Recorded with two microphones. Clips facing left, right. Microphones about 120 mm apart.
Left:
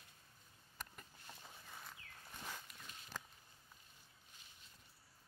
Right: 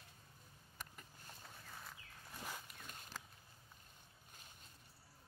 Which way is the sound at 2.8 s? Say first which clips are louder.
Right 2 dB; 50° right (ahead or behind).